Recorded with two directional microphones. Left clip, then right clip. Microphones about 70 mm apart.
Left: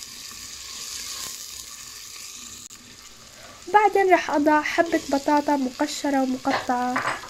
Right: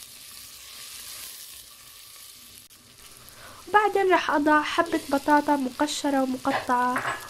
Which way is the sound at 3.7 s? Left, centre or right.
Centre.